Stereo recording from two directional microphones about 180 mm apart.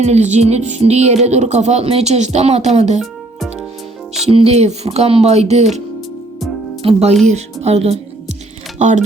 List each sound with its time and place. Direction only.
0.0 s music: 40° right (ahead or behind)
4.3 s music: 35° right (ahead or behind)
6.8 s music: 35° right (ahead or behind)
7.3 s speech: 35° right (ahead or behind)
8.8 s music: 40° right (ahead or behind)